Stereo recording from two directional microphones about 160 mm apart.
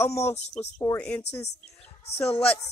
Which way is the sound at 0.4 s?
45° left (ahead or behind).